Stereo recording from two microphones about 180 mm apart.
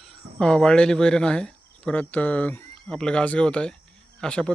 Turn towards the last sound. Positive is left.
turn(degrees=5)  # may be behind; listen again after turning